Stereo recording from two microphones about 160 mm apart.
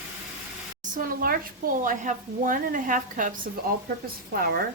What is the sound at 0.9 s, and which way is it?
A woman's voice, 65° right (ahead or behind).